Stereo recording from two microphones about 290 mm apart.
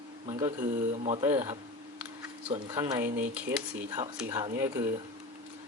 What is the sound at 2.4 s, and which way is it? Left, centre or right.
Speech, centre.